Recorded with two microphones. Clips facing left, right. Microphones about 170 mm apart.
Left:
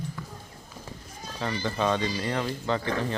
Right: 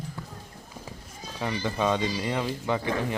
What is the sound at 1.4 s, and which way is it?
Speech, 10° right (ahead or behind).